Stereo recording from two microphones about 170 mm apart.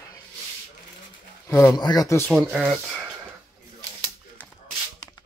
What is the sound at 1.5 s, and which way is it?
Speech, 20° left (ahead or behind).